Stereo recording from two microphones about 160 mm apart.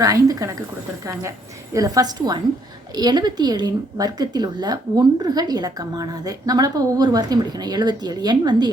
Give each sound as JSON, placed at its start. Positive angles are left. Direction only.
{"t": 0.0, "sound": "speech", "side_deg": -20}
{"t": 1.7, "sound": "speech", "side_deg": -20}